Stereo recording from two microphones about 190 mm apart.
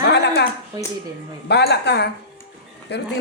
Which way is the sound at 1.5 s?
60° left (ahead or behind).